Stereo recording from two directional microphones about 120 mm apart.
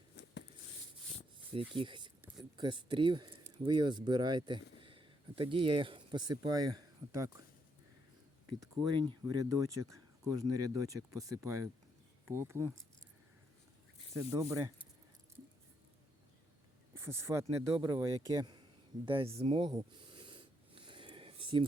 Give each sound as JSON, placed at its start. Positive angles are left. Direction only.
{"t": 1.7, "sound": "speech", "side_deg": -45}
{"t": 8.6, "sound": "speech", "side_deg": -35}
{"t": 14.1, "sound": "speech", "side_deg": -25}
{"t": 16.9, "sound": "speech", "side_deg": -20}
{"t": 19.0, "sound": "snort", "side_deg": -50}